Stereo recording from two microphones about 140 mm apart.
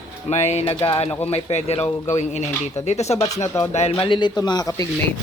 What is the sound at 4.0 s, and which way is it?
Speech, 35° left (ahead or behind).